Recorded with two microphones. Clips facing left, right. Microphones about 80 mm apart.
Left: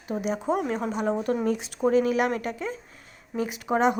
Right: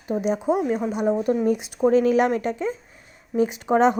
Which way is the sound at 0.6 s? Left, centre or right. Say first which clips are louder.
Right 4 dB; centre.